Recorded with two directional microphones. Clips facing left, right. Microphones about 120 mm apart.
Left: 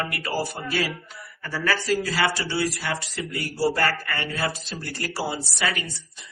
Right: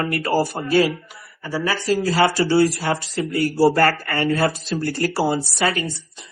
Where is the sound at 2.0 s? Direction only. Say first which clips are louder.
Right 7 dB; 35° right (ahead or behind).